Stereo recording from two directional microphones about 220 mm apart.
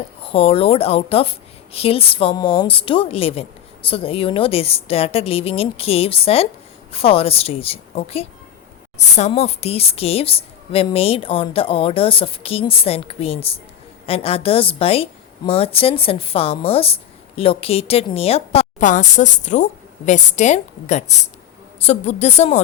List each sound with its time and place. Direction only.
0.2 s a woman's voice: 25° left (ahead or behind)